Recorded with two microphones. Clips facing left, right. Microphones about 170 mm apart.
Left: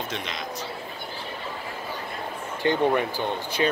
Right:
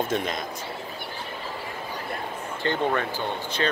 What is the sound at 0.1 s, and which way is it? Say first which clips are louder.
Speech: right 6 dB; 50° right (ahead or behind).